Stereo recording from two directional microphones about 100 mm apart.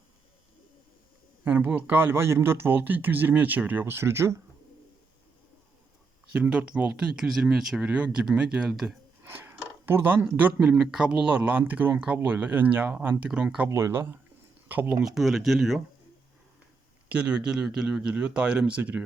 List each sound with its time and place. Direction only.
1.5 s speech: 20° right (ahead or behind)
6.3 s speech: 10° right (ahead or behind)
7.9 s speech: 15° right (ahead or behind)
9.2 s chopping: 25° right (ahead or behind)
10.2 s speech: 15° right (ahead or behind)
13.7 s speech: 30° right (ahead or behind)
15.0 s speech: centre (ahead or behind)
17.1 s speech: 15° right (ahead or behind)